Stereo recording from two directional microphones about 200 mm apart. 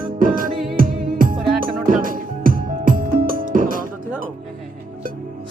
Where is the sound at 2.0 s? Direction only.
45° right (ahead or behind).